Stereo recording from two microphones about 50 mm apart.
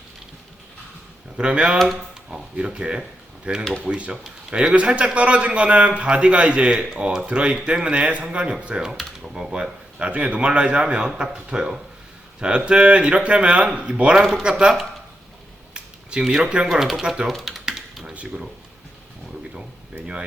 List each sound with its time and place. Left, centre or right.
1.4 s a man's voice: centre
15.7 s a sound: centre
16.3 s a man's voice: centre
17.4 s typing: centre